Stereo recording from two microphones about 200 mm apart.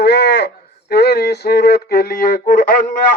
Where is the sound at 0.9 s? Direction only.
55° left (ahead or behind).